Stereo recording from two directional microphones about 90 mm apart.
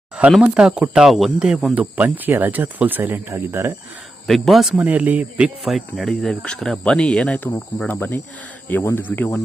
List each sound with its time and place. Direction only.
0.4 s speech: 10° right (ahead or behind); by 3.8 s 30° right (ahead or behind)
4.3 s speech: centre (ahead or behind)
4.8 s speech: 15° right (ahead or behind)
5.6 s speech: centre (ahead or behind); by 9.4 s 20° left (ahead or behind)